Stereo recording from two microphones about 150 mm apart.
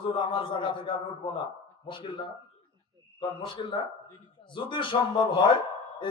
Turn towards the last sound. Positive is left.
turn(degrees=30)  # may be behind; listen again after turning